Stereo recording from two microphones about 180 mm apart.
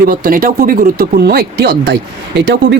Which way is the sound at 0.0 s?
55° right (ahead or behind).